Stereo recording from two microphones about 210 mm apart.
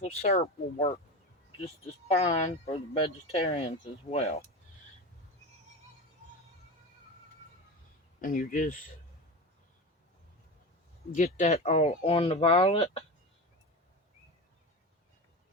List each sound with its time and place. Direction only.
0.0 s speech: 35° left (ahead or behind)
8.2 s speech: 40° left (ahead or behind)
11.1 s speech: 35° left (ahead or behind)